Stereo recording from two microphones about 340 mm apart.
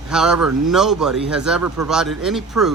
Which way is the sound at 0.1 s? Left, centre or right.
Centre.